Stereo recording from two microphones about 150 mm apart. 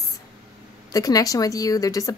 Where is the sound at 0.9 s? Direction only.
25° left (ahead or behind).